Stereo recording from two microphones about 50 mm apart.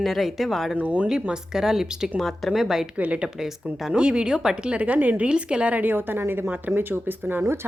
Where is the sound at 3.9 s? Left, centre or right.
Centre.